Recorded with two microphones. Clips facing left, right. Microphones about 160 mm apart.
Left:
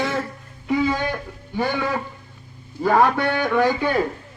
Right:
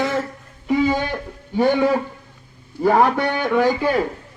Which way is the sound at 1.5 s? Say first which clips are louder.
Right 7 dB; 20° right (ahead or behind).